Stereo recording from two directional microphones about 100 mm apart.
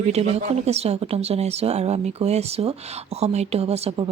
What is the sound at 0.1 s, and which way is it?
Speech, 90° right.